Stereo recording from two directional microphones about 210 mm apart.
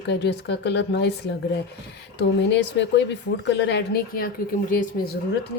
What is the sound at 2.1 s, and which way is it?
A woman's voice, 55° left (ahead or behind).